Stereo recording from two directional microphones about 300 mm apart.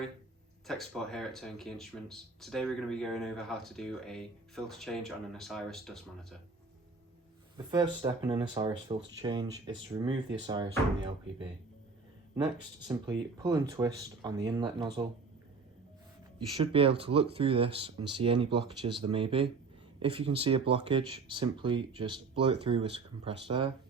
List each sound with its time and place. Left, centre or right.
0.7 s speech: centre
7.5 s speech: centre
12.9 s speech: centre
17.0 s speech: centre